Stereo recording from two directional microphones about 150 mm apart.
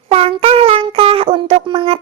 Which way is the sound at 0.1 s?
40° right (ahead or behind).